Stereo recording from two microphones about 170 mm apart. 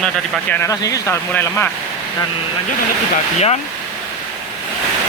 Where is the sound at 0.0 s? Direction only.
10° left (ahead or behind).